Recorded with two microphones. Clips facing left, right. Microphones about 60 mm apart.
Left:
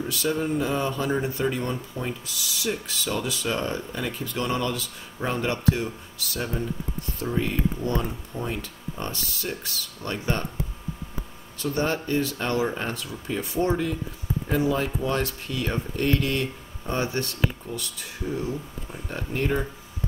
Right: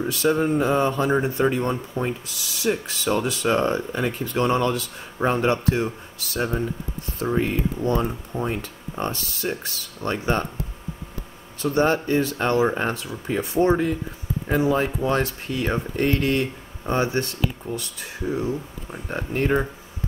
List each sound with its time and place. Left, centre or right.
0.0 s speech: right
11.6 s speech: right